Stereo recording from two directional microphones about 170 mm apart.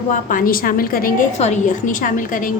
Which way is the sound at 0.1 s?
50° left (ahead or behind).